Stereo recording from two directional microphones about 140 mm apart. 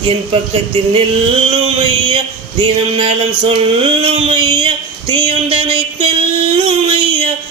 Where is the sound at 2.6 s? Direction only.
40° right (ahead or behind).